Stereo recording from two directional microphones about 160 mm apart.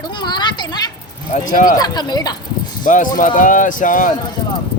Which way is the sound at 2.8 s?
55° left (ahead or behind).